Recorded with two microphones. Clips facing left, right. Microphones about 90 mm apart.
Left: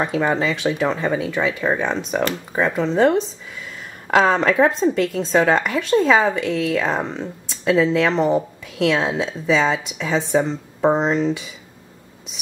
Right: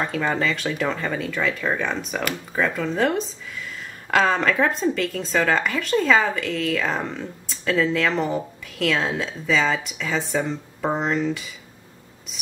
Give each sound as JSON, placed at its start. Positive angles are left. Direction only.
{"t": 0.0, "sound": "speech", "side_deg": 15}